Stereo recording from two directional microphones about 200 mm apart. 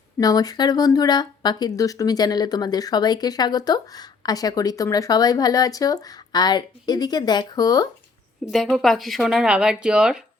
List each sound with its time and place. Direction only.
0.2 s speech: 20° left (ahead or behind)
8.4 s speech: centre (ahead or behind)